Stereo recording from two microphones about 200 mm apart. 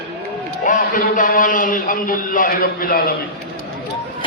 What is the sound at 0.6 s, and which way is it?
A man's voice, 40° left (ahead or behind).